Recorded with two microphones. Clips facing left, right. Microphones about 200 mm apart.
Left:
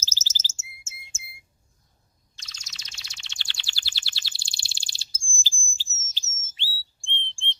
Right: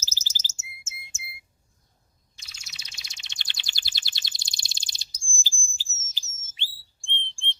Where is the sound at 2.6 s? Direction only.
15° right (ahead or behind).